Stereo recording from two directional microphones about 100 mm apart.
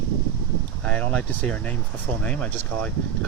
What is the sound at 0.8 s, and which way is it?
Speech, 10° left (ahead or behind).